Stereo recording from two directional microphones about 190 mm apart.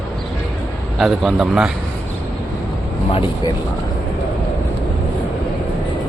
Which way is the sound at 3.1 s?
25° left (ahead or behind).